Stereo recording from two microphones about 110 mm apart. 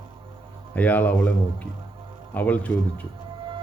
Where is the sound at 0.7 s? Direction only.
15° left (ahead or behind).